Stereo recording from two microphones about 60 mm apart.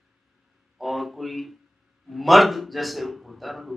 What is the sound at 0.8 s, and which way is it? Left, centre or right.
Speech, centre.